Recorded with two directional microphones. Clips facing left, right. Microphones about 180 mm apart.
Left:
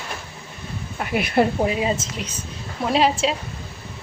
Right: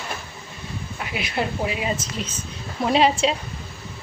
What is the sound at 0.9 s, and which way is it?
Speech, 50° left (ahead or behind).